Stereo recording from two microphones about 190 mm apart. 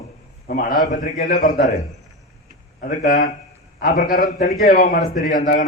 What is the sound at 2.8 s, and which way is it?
A man's voice, 45° left (ahead or behind).